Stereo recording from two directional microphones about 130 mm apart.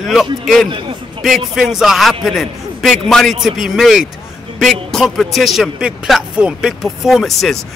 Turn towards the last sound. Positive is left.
turn(degrees=0)  # may be behind; listen again after turning